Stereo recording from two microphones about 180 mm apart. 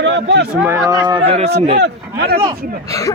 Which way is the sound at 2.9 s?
20° left (ahead or behind).